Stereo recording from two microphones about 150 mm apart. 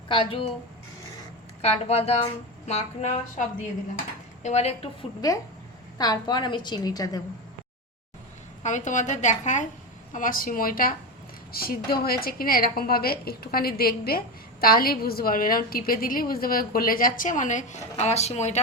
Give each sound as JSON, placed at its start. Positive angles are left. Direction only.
{"t": 0.1, "sound": "speech", "side_deg": 35}
{"t": 1.6, "sound": "a woman's voice", "side_deg": 45}
{"t": 4.4, "sound": "a woman's voice", "side_deg": 45}
{"t": 6.0, "sound": "a woman's voice", "side_deg": 25}
{"t": 8.6, "sound": "a woman's voice", "side_deg": 55}
{"t": 10.1, "sound": "a woman's voice", "side_deg": 65}
{"t": 11.5, "sound": "a woman's voice", "side_deg": 85}
{"t": 14.6, "sound": "a woman's voice", "side_deg": 80}